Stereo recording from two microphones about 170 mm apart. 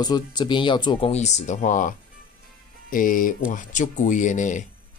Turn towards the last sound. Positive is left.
turn(degrees=45)  # may be behind; listen again after turning